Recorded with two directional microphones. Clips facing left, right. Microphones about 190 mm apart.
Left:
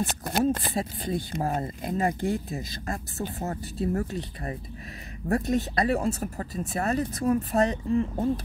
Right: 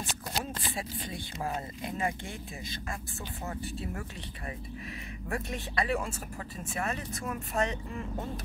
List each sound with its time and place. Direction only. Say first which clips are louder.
0.0 s speech: left 11 dB; 55° left (ahead or behind); by 8.3 s 35° left (ahead or behind)